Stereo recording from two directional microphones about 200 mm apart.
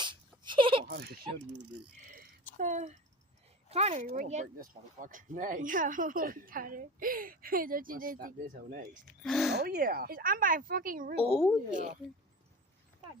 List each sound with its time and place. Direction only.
0.0 s a sound: 25° right (ahead or behind)
0.9 s speech: 50° right (ahead or behind)
2.6 s speech: 35° right (ahead or behind)
9.2 s a sound: centre (ahead or behind)
9.5 s speech: 55° right (ahead or behind)
11.3 s speech: 5° right (ahead or behind)
11.7 s speech: 40° right (ahead or behind)